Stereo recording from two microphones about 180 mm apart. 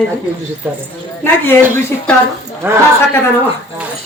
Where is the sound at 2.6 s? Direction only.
10° right (ahead or behind).